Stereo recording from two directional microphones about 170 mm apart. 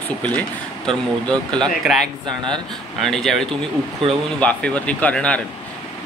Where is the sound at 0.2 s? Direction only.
5° left (ahead or behind).